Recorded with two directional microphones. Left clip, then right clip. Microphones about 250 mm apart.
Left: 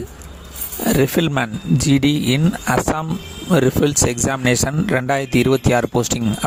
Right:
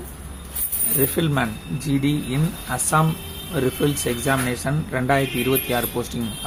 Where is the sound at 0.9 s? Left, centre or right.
Left.